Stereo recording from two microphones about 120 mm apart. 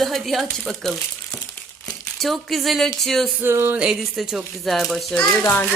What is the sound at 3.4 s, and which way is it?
Speech, 20° right (ahead or behind).